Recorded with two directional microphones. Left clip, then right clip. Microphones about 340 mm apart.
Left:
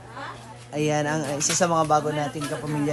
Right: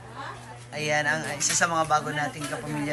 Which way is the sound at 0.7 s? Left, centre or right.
Left.